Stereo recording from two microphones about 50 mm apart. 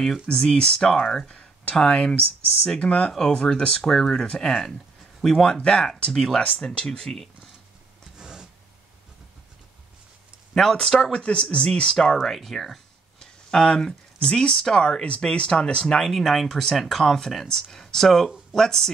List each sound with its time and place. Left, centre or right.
0.3 s speech: centre
1.3 s speech: left
8.2 s a sound: centre
10.5 s speech: centre
12.2 s speech: centre